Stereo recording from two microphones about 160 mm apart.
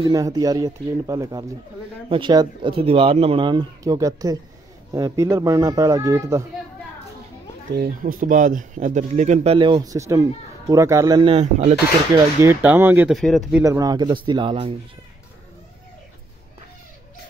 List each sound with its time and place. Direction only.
0.0 s a man's voice: 20° right (ahead or behind)
2.0 s a man's voice: 30° right (ahead or behind)
7.7 s speech: 70° right (ahead or behind); by 11.1 s 20° right (ahead or behind)
11.1 s speech: 35° right (ahead or behind)
12.1 s speech: 15° right (ahead or behind)
13.1 s speech: centre (ahead or behind)
13.7 s a man's voice: 20° right (ahead or behind)